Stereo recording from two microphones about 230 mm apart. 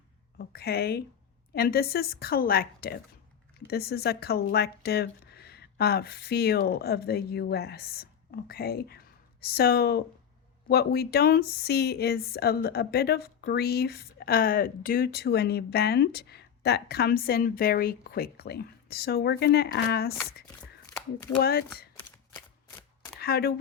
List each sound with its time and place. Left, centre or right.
0.3 s a woman's voice: left
21.4 s speech: left
23.2 s speech: left